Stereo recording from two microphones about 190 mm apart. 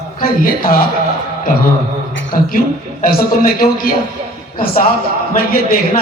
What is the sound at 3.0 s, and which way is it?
Speech, 50° left (ahead or behind).